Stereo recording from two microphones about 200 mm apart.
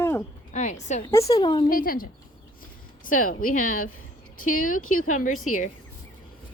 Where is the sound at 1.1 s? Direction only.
15° left (ahead or behind).